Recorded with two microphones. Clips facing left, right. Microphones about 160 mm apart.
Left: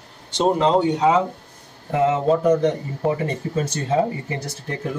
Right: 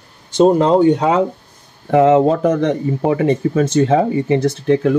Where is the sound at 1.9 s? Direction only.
90° right.